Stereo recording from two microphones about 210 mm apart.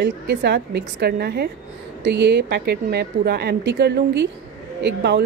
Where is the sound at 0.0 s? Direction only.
50° right (ahead or behind).